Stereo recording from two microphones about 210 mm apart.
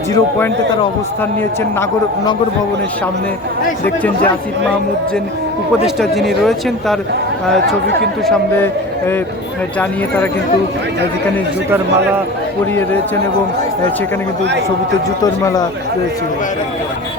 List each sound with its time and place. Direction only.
0.1 s a man's voice: 10° left (ahead or behind)
3.8 s a man's voice: 5° left (ahead or behind)
5.8 s a man's voice: centre (ahead or behind)
15.2 s a man's voice: 15° left (ahead or behind)